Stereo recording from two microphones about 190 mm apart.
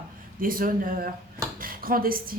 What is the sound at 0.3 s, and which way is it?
A woman's voice, 45° right (ahead or behind).